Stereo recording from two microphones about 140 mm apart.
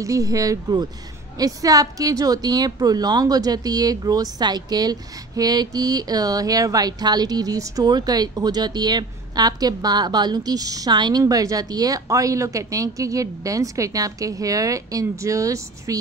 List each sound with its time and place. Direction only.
0.0 s a woman's voice: 25° right (ahead or behind)